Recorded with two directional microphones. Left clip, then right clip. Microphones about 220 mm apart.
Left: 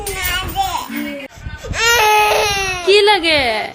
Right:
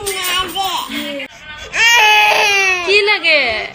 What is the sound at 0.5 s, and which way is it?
Child singing, 20° left (ahead or behind).